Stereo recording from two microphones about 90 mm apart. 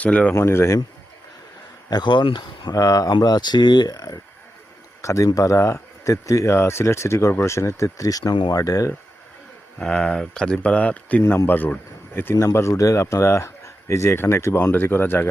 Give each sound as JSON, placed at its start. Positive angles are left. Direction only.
{"t": 0.0, "sound": "speech", "side_deg": 15}
{"t": 0.3, "sound": "speech", "side_deg": 30}
{"t": 1.9, "sound": "speech", "side_deg": 55}
{"t": 2.7, "sound": "speech", "side_deg": 40}
{"t": 9.7, "sound": "speech", "side_deg": 10}